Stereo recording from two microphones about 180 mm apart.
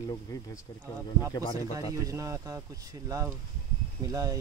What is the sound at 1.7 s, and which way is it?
Speech, 15° right (ahead or behind).